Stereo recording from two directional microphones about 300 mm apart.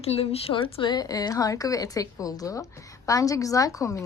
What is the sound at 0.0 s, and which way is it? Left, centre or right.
Speech, centre.